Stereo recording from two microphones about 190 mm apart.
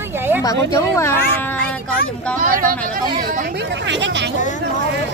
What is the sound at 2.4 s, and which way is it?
Speech, 45° right (ahead or behind).